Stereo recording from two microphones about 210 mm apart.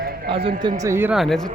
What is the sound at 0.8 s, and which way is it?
Speech, 10° right (ahead or behind).